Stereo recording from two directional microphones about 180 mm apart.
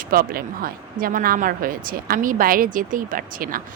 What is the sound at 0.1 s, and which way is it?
A woman's voice, 55° right (ahead or behind).